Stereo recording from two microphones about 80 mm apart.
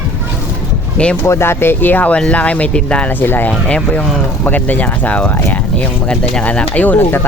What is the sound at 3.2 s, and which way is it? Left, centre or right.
Speech, left.